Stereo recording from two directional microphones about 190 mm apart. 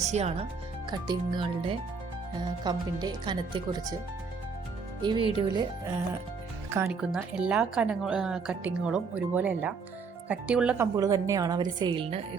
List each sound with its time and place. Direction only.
0.0 s speech: 35° right (ahead or behind)
0.9 s speech: 20° right (ahead or behind)
5.0 s speech: 25° right (ahead or behind)
6.8 s a woman's voice: 5° right (ahead or behind)
10.9 s speech: 20° right (ahead or behind)